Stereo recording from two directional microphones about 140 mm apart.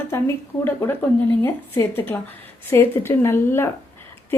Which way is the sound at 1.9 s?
15° left (ahead or behind).